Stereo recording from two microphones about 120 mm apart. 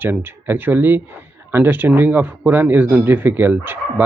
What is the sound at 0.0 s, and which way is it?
Speech, 20° right (ahead or behind).